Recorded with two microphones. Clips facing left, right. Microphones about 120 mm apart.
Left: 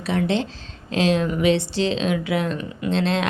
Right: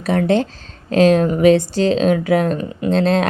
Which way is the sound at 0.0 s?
45° right (ahead or behind).